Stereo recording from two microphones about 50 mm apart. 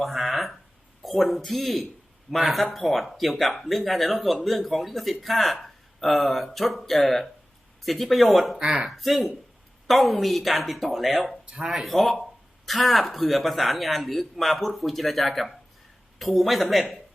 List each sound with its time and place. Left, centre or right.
0.0 s speech: centre
8.5 s speech: centre
8.9 s speech: centre
11.4 s speech: centre
11.7 s speech: centre